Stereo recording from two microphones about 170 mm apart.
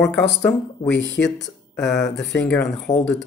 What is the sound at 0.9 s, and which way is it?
Speech, 90° left.